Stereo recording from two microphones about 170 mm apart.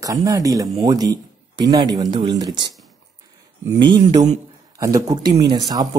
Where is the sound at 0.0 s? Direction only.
20° right (ahead or behind).